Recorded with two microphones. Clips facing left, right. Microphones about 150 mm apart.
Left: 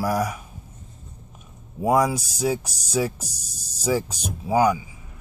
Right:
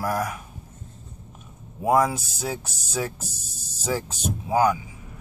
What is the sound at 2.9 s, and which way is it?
Speech, 10° left (ahead or behind).